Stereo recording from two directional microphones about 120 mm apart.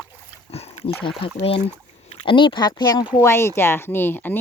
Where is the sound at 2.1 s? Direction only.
50° left (ahead or behind).